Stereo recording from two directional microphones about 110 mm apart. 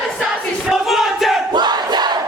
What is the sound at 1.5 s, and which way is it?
Crowd, 40° right (ahead or behind).